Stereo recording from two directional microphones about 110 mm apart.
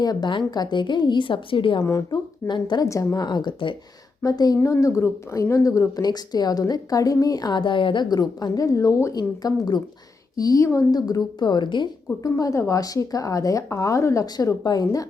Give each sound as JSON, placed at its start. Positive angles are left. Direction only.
{"t": 0.0, "sound": "a woman's voice", "side_deg": 40}
{"t": 1.8, "sound": "a woman's voice", "side_deg": 35}
{"t": 2.8, "sound": "a woman's voice", "side_deg": 30}
{"t": 4.2, "sound": "a woman's voice", "side_deg": 35}
{"t": 12.2, "sound": "a woman's voice", "side_deg": 30}